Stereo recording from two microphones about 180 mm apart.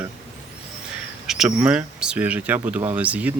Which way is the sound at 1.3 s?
5° right (ahead or behind).